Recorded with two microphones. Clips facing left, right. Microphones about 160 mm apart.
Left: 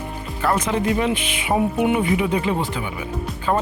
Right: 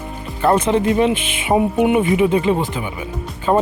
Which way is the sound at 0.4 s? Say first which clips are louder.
Right 5 dB; 25° right (ahead or behind).